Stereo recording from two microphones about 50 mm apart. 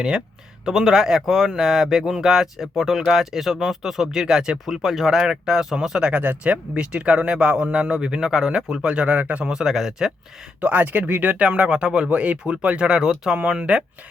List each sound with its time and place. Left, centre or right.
0.6 s speech: centre
6.1 s speech: right; by 8.6 s centre
8.8 s speech: right
9.4 s speech: centre
10.6 s speech: right
11.4 s speech: centre